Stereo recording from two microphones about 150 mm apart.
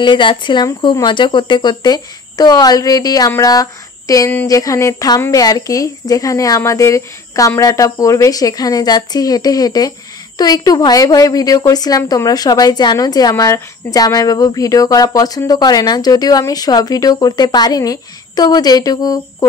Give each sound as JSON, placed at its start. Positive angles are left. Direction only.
{"t": 0.0, "sound": "a woman's voice", "side_deg": 35}